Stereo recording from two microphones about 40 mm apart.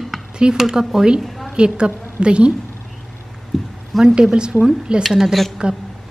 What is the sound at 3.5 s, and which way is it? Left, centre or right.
Speech, centre.